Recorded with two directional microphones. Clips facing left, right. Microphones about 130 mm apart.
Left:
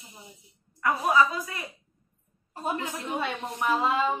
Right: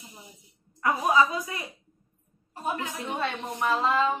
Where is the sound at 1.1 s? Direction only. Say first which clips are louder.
Left 1 dB; 20° right (ahead or behind).